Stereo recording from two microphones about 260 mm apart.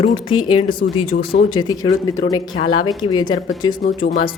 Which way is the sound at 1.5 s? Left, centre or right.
Centre.